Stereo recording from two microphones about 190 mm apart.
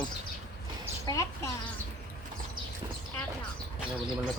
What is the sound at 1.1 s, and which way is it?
Speech, 15° left (ahead or behind).